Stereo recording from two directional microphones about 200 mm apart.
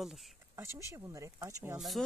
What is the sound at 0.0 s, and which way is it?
Speech, centre (ahead or behind).